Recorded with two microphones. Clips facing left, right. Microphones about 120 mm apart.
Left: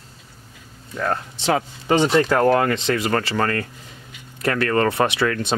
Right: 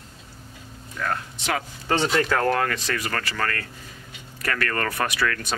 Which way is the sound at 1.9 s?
15° left (ahead or behind).